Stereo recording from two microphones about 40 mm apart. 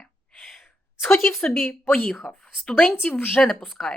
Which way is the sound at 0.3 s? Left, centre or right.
Centre.